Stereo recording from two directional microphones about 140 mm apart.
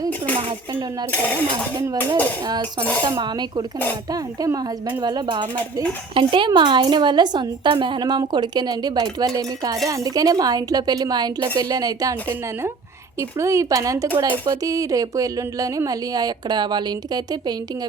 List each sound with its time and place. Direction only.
3.0 s a woman's voice: 30° right (ahead or behind)
13.4 s speech: 20° right (ahead or behind)